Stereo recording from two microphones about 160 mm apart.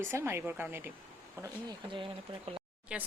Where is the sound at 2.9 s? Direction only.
5° right (ahead or behind).